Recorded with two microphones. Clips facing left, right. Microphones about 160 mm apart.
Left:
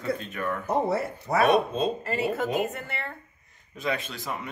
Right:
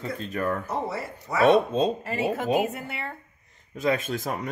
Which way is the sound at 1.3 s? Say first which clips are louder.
Left 1 dB; 35° left (ahead or behind).